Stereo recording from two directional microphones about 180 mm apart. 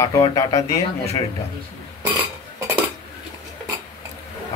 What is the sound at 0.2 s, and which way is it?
Speech, 20° left (ahead or behind).